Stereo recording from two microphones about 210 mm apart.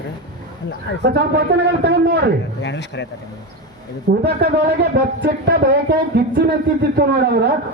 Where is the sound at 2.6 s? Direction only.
55° left (ahead or behind).